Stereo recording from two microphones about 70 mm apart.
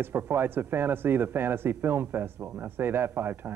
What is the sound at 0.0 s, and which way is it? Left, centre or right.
Speech, right.